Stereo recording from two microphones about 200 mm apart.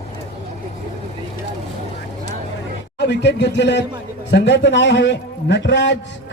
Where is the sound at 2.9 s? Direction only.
60° left (ahead or behind).